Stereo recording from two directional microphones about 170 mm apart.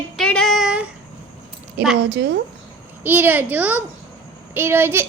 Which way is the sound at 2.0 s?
90° right.